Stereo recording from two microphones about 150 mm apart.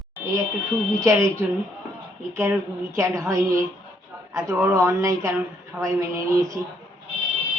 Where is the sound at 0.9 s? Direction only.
20° right (ahead or behind).